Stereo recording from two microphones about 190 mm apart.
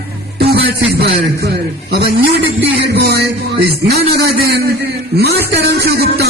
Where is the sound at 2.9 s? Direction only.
60° right (ahead or behind).